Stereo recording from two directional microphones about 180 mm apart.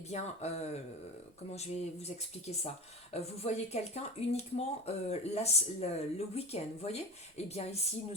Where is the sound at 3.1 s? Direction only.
35° left (ahead or behind).